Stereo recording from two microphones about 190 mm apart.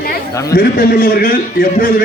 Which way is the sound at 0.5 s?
55° left (ahead or behind).